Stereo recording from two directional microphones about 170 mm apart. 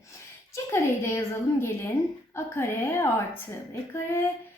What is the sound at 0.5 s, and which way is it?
A woman's voice, 15° left (ahead or behind).